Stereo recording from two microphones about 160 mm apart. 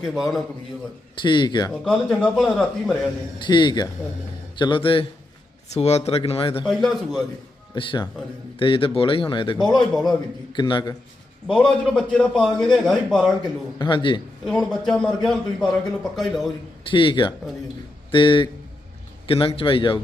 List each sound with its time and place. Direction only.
0.0 s a man's voice: centre (ahead or behind)
1.1 s a man's voice: 30° left (ahead or behind)
1.7 s a man's voice: 5° left (ahead or behind)
3.3 s a man's voice: 30° left (ahead or behind)
6.7 s a man's voice: centre (ahead or behind)
7.8 s a man's voice: 30° left (ahead or behind)
11.4 s a man's voice: 5° left (ahead or behind)
13.7 s a man's voice: 30° left (ahead or behind)
14.4 s a man's voice: centre (ahead or behind)
16.9 s a man's voice: 30° left (ahead or behind)